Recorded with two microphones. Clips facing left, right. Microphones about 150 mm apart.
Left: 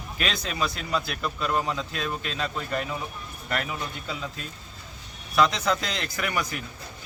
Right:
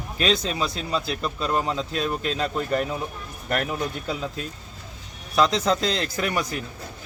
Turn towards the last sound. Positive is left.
turn(degrees=-35)  # may be behind; listen again after turning